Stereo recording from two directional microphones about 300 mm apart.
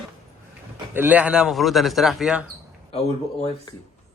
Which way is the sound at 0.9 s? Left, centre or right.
Centre.